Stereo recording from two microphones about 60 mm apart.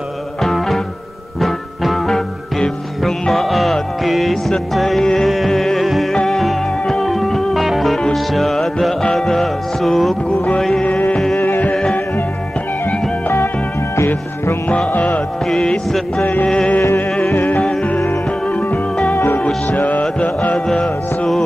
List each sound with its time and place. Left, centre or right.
0.4 s music: centre
10.8 s music: left
11.3 s music: left
13.9 s music: left
14.9 s music: left
15.4 s music: centre
19.1 s music: left
19.4 s music: centre
20.5 s music: centre